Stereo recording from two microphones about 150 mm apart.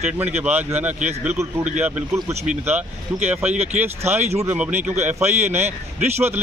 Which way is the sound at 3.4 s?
45° right (ahead or behind).